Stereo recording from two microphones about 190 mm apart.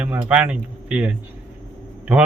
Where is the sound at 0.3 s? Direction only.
5° right (ahead or behind).